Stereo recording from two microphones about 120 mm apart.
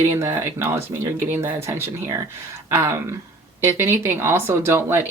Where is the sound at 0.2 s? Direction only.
20° right (ahead or behind).